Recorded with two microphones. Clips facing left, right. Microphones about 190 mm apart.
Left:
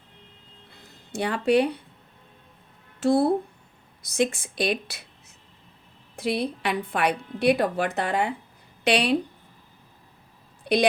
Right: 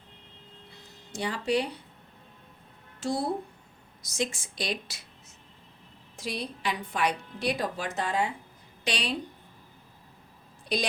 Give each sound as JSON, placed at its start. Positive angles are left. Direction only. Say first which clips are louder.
{"t": 1.1, "sound": "a woman's voice", "louder": "left 7 dB", "side_deg": 60}
{"t": 3.0, "sound": "a woman's voice", "louder": "left 9 dB", "side_deg": 60}
{"t": 6.1, "sound": "a woman's voice", "louder": "left 9 dB", "side_deg": 60}
{"t": 10.7, "sound": "a sound", "louder": "left 8 dB", "side_deg": 60}